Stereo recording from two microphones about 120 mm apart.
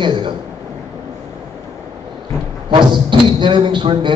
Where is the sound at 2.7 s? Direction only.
40° right (ahead or behind).